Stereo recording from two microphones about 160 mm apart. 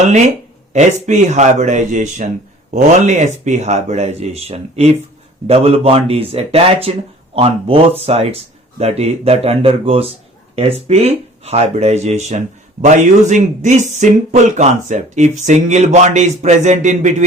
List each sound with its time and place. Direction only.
0.7 s speech: 50° right (ahead or behind)